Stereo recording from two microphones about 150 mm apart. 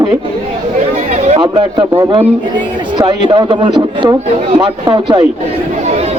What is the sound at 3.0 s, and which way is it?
A man's voice, 30° right (ahead or behind).